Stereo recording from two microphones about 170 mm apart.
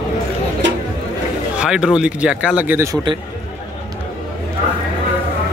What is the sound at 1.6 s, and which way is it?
Speech, 5° right (ahead or behind).